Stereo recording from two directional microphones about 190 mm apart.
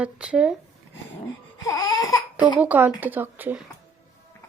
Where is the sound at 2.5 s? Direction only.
10° right (ahead or behind).